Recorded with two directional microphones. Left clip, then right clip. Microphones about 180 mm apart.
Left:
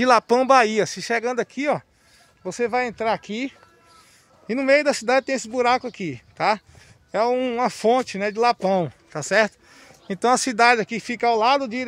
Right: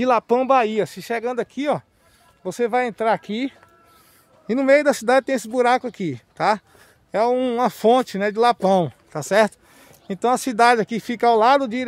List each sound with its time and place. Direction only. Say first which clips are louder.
0.0 s speech: left 1 dB; centre (ahead or behind); by 9.8 s 20° right (ahead or behind)
10.0 s speech: left 1 dB; 5° right (ahead or behind)
10.6 s speech: right 3 dB; 20° right (ahead or behind)